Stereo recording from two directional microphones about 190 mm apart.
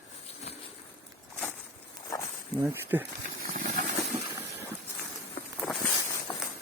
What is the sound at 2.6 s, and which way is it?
Speech, 10° right (ahead or behind).